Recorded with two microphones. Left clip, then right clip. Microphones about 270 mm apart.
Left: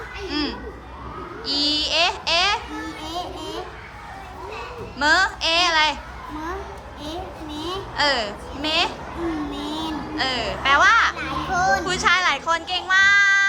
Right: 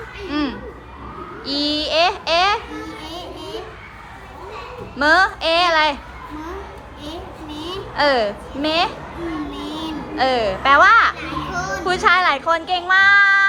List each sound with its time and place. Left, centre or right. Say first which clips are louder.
0.3 s a sound: right 3 dB; centre
4.9 s speech: right 4 dB; centre
7.0 s children playing: even; centre
7.7 s a woman's voice: right 4 dB; centre
9.5 s a sound: even; centre
11.5 s speech: left 2 dB; centre